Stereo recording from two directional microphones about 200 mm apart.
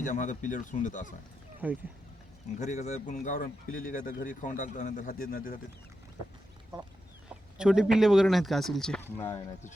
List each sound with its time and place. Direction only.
0.0 s speech: 40° left (ahead or behind)
1.6 s speech: 10° right (ahead or behind)
2.6 s speech: 35° left (ahead or behind)
7.3 s speech: 5° right (ahead or behind)